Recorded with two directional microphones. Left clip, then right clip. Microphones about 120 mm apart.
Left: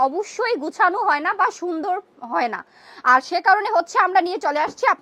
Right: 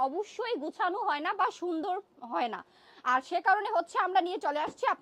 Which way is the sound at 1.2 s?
25° right (ahead or behind).